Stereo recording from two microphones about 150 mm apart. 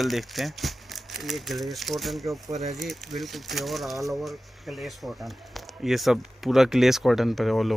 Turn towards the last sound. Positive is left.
turn(degrees=0)  # may be behind; listen again after turning